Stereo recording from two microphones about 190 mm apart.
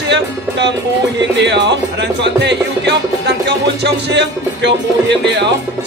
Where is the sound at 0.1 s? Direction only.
65° right (ahead or behind).